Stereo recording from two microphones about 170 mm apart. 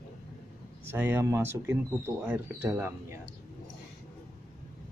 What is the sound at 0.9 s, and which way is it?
A man's voice, 15° right (ahead or behind).